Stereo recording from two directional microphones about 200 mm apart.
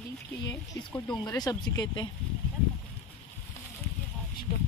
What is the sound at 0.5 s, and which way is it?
Speech, 20° left (ahead or behind).